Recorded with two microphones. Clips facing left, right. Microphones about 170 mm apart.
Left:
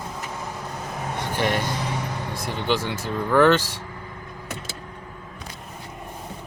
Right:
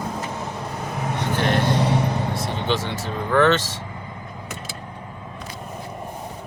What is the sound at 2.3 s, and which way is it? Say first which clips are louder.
Speech: right 1 dB; 10° left (ahead or behind).